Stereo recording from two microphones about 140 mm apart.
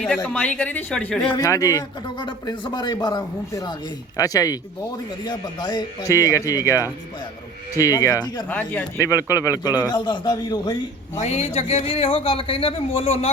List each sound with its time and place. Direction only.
0.0 s a woman's voice: 10° left (ahead or behind)
1.2 s speech: 35° left (ahead or behind)
1.5 s speech: 25° left (ahead or behind)
8.4 s a woman's voice: 10° left (ahead or behind)
9.1 s speech: 20° left (ahead or behind)
9.6 s a man's voice: 15° right (ahead or behind)
9.9 s speech: 30° left (ahead or behind)
11.2 s speech: 50° left (ahead or behind)